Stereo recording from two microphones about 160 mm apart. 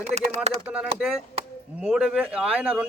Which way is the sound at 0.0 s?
45° right (ahead or behind).